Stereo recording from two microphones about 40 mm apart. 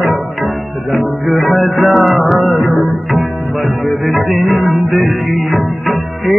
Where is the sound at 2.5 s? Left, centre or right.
Left.